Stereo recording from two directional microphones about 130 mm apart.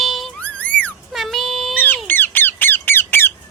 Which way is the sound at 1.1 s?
Centre (ahead or behind).